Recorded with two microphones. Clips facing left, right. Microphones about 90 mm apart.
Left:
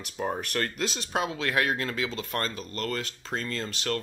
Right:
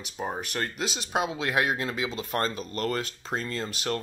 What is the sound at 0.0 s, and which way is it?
Speech, 5° right (ahead or behind).